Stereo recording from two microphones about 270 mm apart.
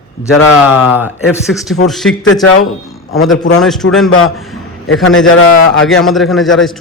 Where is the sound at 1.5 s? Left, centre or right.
Centre.